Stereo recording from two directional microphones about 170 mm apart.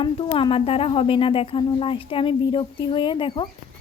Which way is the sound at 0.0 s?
30° left (ahead or behind).